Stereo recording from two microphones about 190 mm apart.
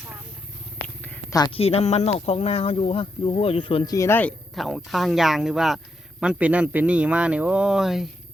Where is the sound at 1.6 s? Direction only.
35° left (ahead or behind).